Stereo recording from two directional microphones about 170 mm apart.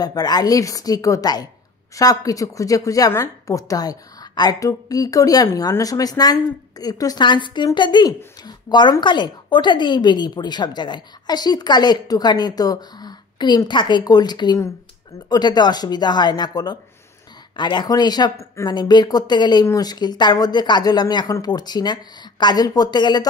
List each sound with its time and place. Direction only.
0.0 s speech: 25° left (ahead or behind)